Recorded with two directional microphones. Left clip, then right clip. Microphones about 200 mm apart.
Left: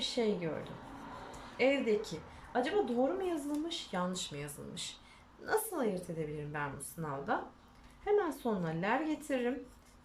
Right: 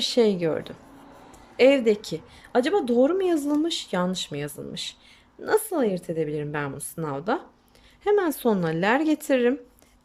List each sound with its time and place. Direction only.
0.0 s a woman's voice: 55° right (ahead or behind)
1.5 s speech: 55° right (ahead or behind)